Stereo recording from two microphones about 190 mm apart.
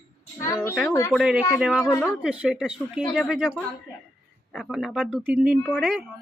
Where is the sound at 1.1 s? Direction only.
5° right (ahead or behind).